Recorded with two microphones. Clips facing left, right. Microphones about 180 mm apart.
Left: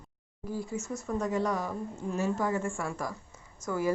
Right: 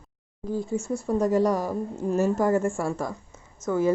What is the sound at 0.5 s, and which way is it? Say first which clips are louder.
A woman's voice: right 7 dB; 25° right (ahead or behind).